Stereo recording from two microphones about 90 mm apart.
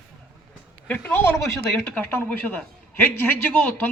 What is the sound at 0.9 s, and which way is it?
A man's voice, 20° left (ahead or behind).